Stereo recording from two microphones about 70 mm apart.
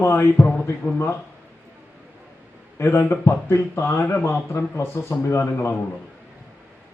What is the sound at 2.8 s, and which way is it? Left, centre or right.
Speech, left.